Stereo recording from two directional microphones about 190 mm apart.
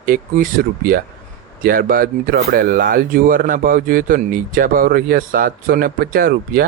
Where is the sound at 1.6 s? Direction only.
50° right (ahead or behind).